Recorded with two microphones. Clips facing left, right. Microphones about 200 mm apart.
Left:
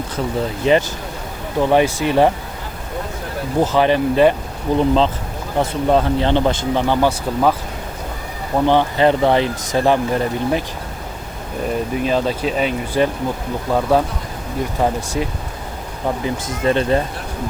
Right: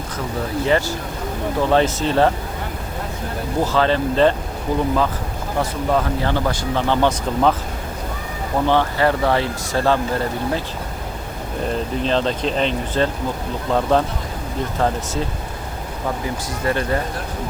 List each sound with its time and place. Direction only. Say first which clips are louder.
0.6 s speech: left 3 dB; 20° left (ahead or behind)
3.6 s speech: left 3 dB; 20° left (ahead or behind)
4.8 s speech: left 5 dB; 25° left (ahead or behind)
8.6 s speech: left 3 dB; 15° left (ahead or behind)
11.9 s speech: left 1 dB; 10° left (ahead or behind)